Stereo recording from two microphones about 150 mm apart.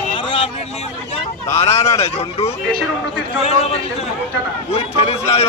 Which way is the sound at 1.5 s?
40° left (ahead or behind).